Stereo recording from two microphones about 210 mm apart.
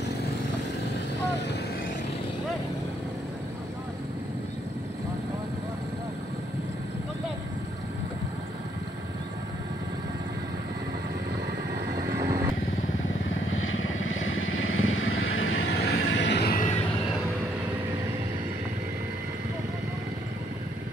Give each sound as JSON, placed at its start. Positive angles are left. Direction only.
{"t": 12.2, "sound": "vehicle", "side_deg": -15}
{"t": 13.5, "sound": "vehicle", "side_deg": 75}